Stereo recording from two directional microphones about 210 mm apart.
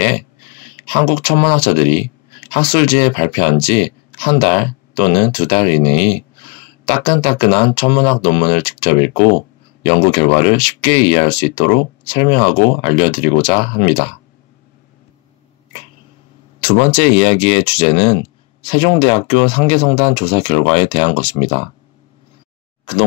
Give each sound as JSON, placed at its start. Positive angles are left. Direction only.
{"t": 0.7, "sound": "speech", "side_deg": 25}
{"t": 16.6, "sound": "speech", "side_deg": 25}